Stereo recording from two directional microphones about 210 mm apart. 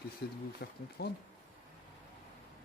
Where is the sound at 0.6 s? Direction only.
50° left (ahead or behind).